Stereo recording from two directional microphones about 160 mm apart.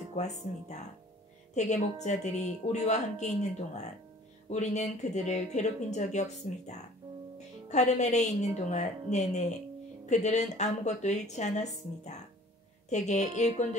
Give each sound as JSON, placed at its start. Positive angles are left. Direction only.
{"t": 0.1, "sound": "speech", "side_deg": 45}